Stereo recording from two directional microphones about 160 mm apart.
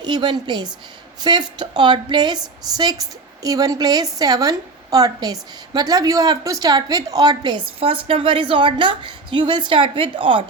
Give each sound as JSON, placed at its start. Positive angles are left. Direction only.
{"t": 0.0, "sound": "a woman's voice", "side_deg": -25}